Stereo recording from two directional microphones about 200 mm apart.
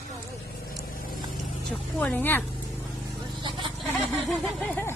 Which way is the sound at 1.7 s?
5° left (ahead or behind).